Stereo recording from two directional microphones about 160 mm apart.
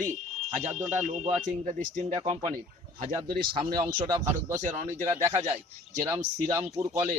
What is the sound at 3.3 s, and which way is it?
Speech, 65° right (ahead or behind).